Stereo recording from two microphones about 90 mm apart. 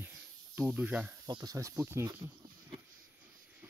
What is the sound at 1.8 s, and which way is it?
Speech, 30° right (ahead or behind).